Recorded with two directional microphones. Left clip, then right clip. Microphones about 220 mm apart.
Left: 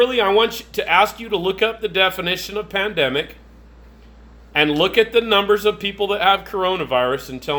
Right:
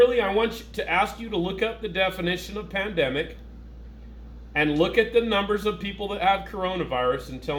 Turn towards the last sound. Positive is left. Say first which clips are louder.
# left 4 dB
turn(degrees=35)  # may be behind; listen again after turning